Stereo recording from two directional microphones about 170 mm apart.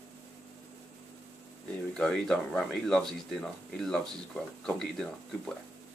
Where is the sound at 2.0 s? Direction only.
Centre (ahead or behind).